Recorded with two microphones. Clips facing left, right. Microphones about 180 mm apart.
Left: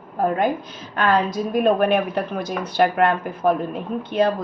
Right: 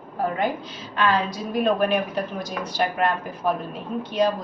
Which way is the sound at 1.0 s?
50° left (ahead or behind).